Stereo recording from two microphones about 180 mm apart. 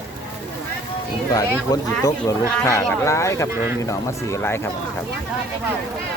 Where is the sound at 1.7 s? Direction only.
15° left (ahead or behind).